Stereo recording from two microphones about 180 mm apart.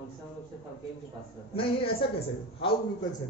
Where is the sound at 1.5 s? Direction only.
30° left (ahead or behind).